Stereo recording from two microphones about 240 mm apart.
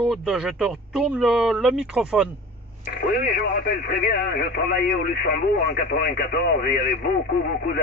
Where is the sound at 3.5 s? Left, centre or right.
Left.